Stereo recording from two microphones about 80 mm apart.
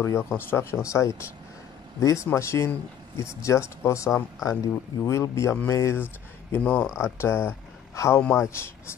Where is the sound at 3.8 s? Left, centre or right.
Left.